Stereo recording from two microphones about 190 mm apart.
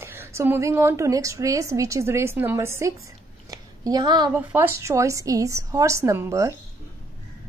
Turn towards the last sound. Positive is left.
turn(degrees=-15)  # may be behind; listen again after turning